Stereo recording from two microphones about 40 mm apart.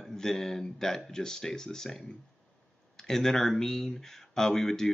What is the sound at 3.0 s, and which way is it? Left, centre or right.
Speech, centre.